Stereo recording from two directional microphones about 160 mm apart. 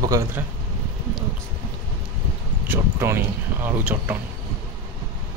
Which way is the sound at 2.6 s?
15° right (ahead or behind).